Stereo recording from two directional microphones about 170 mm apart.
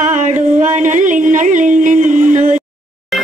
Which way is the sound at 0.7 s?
50° right (ahead or behind).